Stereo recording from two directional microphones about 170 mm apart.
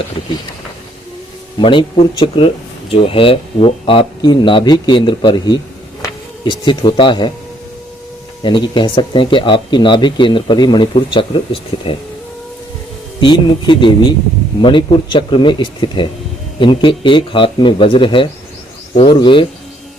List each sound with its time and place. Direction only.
1.5 s speech: 30° left (ahead or behind)
8.4 s speech: 30° left (ahead or behind)
13.1 s speech: 25° left (ahead or behind)